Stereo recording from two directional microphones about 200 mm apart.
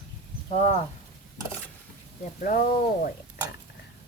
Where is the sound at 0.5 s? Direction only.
35° left (ahead or behind).